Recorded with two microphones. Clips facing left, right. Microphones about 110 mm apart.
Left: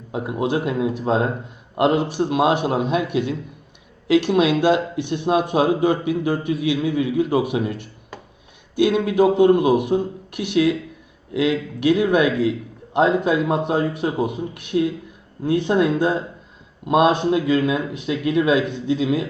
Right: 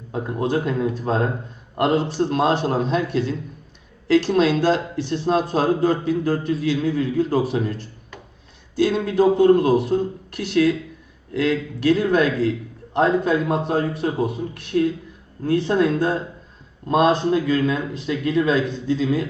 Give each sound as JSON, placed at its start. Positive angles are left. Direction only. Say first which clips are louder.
{"t": 0.1, "sound": "a man's voice", "louder": "even", "side_deg": 15}